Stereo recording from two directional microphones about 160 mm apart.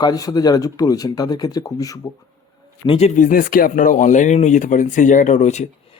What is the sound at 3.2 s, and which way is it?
Speech, 60° left (ahead or behind).